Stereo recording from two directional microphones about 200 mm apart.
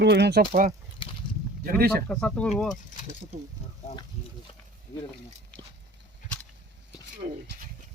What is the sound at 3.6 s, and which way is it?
Speech, 30° left (ahead or behind).